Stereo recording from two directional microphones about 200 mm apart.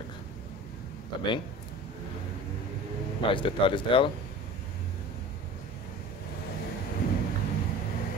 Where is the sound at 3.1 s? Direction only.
25° left (ahead or behind).